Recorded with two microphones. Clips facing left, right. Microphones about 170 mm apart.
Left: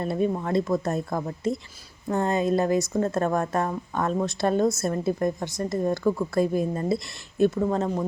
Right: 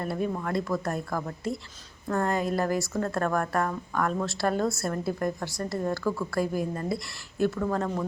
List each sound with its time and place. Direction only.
0.0 s speech: 20° left (ahead or behind)